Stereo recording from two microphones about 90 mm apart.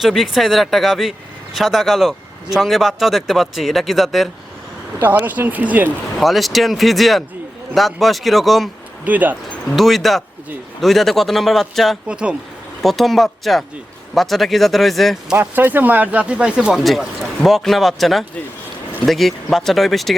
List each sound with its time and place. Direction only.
0.0 s speech: centre (ahead or behind)
4.9 s speech: 20° right (ahead or behind)
6.1 s speech: centre (ahead or behind)
9.0 s speech: 20° right (ahead or behind)
9.7 s speech: centre (ahead or behind)
12.0 s speech: 10° right (ahead or behind)
12.8 s speech: centre (ahead or behind)
15.4 s speech: 20° right (ahead or behind); by 20.1 s centre (ahead or behind)